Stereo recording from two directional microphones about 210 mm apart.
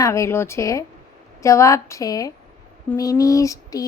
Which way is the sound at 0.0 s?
15° left (ahead or behind).